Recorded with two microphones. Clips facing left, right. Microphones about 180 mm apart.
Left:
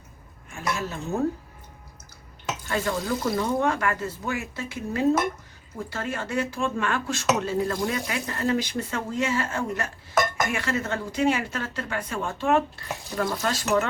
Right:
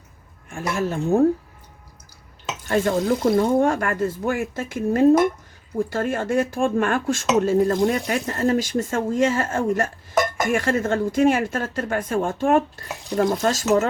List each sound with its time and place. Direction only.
0.5 s speech: 50° right (ahead or behind)
2.6 s speech: 50° right (ahead or behind)